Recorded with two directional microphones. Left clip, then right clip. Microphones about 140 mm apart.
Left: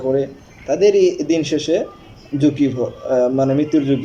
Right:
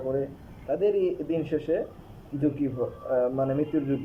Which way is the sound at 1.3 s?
5° left (ahead or behind).